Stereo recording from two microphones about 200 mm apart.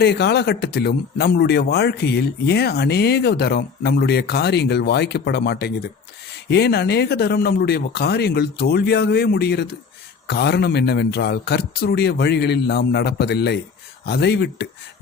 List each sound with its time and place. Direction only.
0.0 s a man's voice: 55° left (ahead or behind)